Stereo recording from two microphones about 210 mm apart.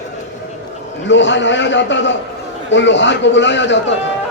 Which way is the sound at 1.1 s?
60° left (ahead or behind).